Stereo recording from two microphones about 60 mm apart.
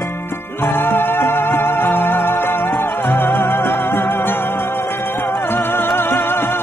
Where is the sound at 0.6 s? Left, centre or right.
Left.